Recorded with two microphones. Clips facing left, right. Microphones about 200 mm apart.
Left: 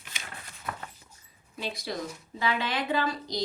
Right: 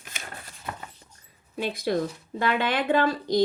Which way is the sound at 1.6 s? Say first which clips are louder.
Right 8 dB; 55° right (ahead or behind).